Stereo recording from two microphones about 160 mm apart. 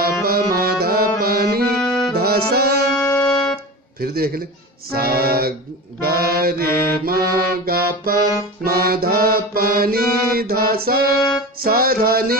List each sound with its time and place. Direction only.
0.0 s music: 75° right (ahead or behind)
1.6 s accordion: 5° left (ahead or behind)
2.1 s accordion: 75° right (ahead or behind)
3.3 s music: centre (ahead or behind)
4.0 s music: 70° right (ahead or behind)